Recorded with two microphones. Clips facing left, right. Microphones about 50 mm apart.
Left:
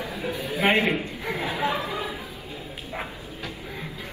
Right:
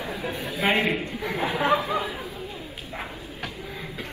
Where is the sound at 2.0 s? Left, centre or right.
Right.